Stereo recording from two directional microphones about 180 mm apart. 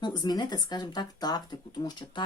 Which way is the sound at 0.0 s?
25° left (ahead or behind).